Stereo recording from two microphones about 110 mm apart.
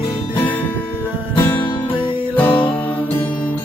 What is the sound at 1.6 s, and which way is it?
Music, 50° left (ahead or behind).